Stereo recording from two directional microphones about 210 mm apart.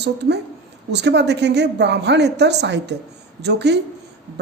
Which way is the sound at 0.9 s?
55° right (ahead or behind).